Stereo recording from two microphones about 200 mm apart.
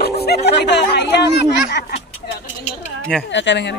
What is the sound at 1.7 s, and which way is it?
Speech, 55° left (ahead or behind).